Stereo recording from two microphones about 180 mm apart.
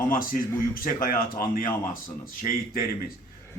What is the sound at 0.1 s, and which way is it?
Speech, 50° left (ahead or behind).